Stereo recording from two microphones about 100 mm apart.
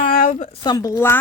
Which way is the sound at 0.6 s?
40° left (ahead or behind).